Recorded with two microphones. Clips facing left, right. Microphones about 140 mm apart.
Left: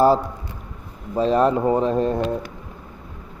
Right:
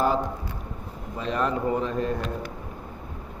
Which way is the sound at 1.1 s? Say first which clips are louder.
Left 9 dB; 35° left (ahead or behind).